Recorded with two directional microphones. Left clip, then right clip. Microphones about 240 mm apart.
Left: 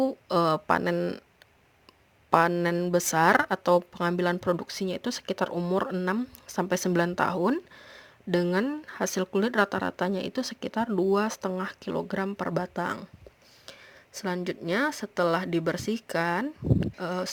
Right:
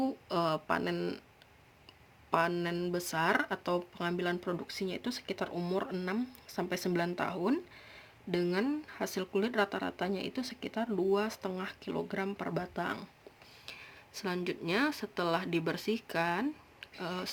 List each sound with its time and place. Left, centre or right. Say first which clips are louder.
0.0 s speech: left 8 dB; left
2.3 s speech: left 8 dB; left